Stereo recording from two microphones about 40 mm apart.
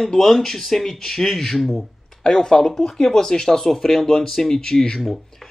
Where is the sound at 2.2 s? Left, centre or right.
Centre.